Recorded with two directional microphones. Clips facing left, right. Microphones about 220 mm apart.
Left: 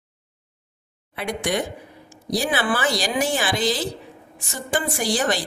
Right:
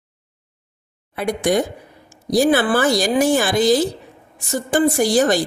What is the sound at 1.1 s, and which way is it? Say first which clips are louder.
A woman's voice: right 6 dB; 45° right (ahead or behind).